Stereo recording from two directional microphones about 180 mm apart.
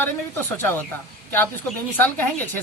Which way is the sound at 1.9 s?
10° left (ahead or behind).